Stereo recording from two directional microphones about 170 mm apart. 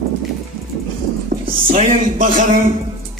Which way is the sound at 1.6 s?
50° right (ahead or behind).